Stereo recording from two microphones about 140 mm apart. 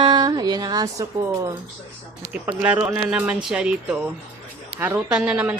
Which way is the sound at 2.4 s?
10° right (ahead or behind).